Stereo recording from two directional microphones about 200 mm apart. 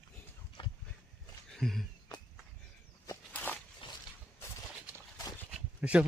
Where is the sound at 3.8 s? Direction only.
25° left (ahead or behind).